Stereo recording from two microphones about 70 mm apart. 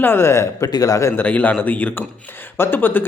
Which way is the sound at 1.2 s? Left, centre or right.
Left.